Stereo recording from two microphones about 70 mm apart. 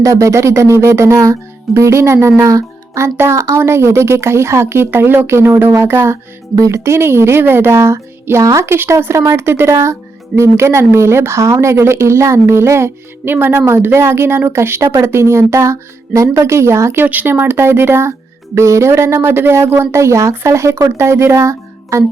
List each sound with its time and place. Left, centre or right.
0.0 s speech: right
6.6 s speech: right
8.7 s speech: right
13.3 s speech: right
17.0 s speech: right